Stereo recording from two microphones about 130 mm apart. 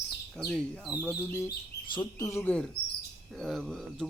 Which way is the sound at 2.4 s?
10° left (ahead or behind).